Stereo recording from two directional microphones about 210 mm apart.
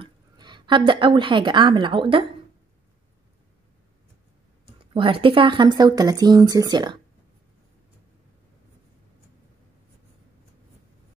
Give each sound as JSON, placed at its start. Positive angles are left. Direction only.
{"t": 0.0, "sound": "a woman's voice", "side_deg": -20}
{"t": 4.9, "sound": "speech", "side_deg": -25}